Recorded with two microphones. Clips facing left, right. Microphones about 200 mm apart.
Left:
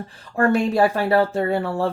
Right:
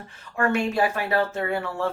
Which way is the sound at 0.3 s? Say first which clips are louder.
Left 5 dB; 35° left (ahead or behind).